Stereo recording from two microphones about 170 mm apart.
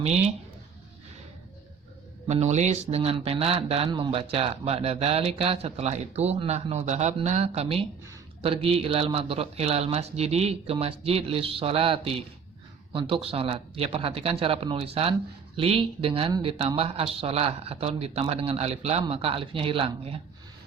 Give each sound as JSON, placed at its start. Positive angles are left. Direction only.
{"t": 2.2, "sound": "speech", "side_deg": -40}